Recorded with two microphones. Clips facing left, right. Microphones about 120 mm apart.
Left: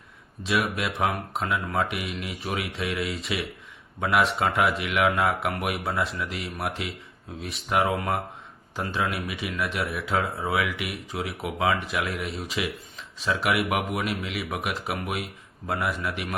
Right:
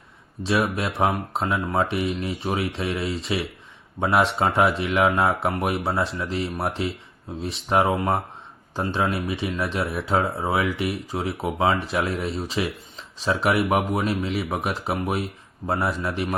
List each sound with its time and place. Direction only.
0.4 s speech: 30° right (ahead or behind)